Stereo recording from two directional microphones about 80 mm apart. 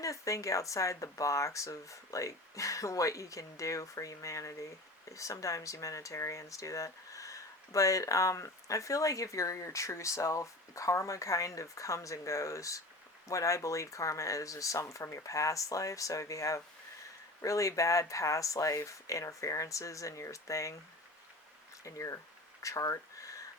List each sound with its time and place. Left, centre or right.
0.0 s speech: left
21.8 s speech: left
22.6 s a sound: left